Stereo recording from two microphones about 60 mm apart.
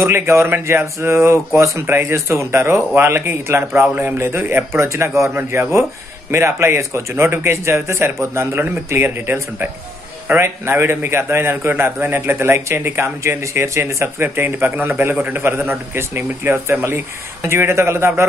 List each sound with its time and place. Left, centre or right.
0.0 s a man's voice: right
3.9 s speech: right
4.3 s a man's voice: right
8.5 s a man's voice: right